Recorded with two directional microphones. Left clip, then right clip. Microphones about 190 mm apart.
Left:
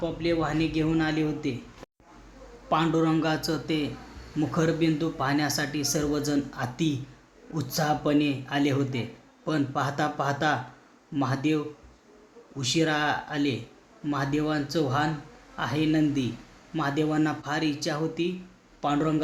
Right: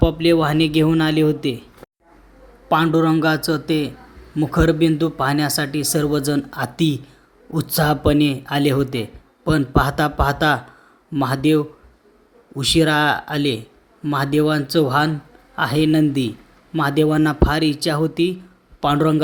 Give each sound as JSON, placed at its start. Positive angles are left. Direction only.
{"t": 0.0, "sound": "speech", "side_deg": -40}
{"t": 2.6, "sound": "a man's voice", "side_deg": -35}